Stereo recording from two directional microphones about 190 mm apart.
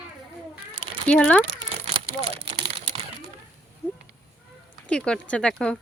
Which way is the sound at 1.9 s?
25° right (ahead or behind).